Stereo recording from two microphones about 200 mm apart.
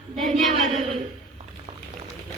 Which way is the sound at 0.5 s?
35° right (ahead or behind).